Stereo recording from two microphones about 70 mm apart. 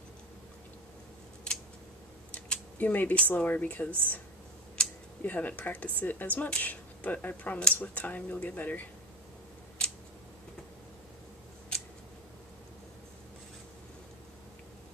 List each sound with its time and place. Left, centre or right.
2.5 s speech: left
4.8 s a sound: centre
5.2 s speech: left
9.8 s scissors: centre